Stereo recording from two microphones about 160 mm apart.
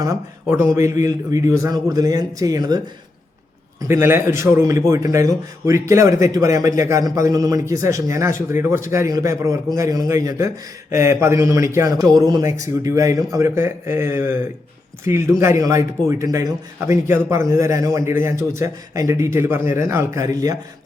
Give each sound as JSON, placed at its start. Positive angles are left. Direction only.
{"t": 0.4, "sound": "a man's voice", "side_deg": -20}
{"t": 3.8, "sound": "a man's voice", "side_deg": -15}